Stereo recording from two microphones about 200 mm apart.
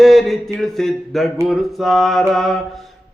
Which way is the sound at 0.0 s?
Centre (ahead or behind).